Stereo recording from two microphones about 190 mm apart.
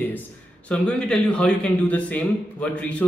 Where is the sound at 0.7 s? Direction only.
5° left (ahead or behind).